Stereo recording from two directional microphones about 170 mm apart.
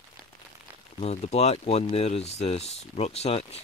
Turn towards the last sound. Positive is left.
turn(degrees=40)  # may be behind; listen again after turning